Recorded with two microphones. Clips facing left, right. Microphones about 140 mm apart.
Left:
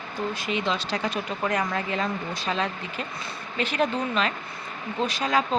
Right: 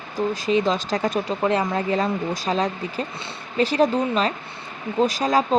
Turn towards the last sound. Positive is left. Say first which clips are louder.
# right 5 dB
turn(degrees=-40)  # may be behind; listen again after turning